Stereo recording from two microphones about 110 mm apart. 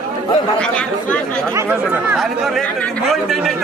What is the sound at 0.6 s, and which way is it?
Speech, 10° left (ahead or behind).